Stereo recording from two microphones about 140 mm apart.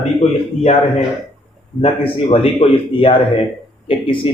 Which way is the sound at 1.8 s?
40° left (ahead or behind).